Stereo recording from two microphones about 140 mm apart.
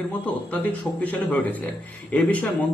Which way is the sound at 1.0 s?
10° left (ahead or behind).